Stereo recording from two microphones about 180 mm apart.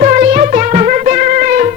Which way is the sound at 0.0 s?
45° right (ahead or behind).